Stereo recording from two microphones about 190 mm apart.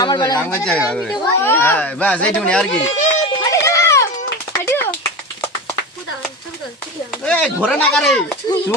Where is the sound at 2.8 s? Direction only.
40° left (ahead or behind).